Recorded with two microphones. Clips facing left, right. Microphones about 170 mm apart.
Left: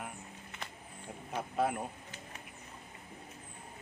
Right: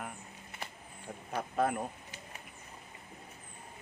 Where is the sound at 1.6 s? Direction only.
5° left (ahead or behind).